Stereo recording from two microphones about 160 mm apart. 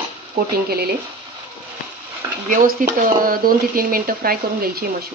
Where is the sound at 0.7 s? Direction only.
75° right (ahead or behind).